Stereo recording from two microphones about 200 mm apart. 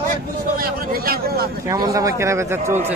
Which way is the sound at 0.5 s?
50° right (ahead or behind).